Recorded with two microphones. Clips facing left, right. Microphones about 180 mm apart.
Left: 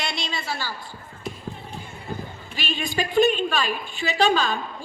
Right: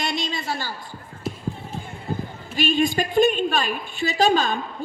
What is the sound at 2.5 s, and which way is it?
A man's voice, 50° right (ahead or behind).